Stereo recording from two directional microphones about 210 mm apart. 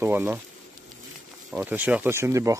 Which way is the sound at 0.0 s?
10° right (ahead or behind).